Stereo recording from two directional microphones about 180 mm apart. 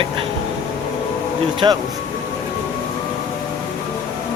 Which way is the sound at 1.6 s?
25° right (ahead or behind).